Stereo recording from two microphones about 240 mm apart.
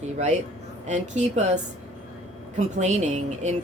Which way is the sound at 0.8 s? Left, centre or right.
Right.